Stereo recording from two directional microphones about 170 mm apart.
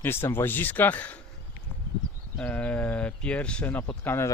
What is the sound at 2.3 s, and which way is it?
Speech, 10° left (ahead or behind).